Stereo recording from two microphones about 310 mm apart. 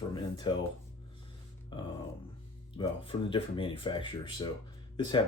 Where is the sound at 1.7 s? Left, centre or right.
Centre.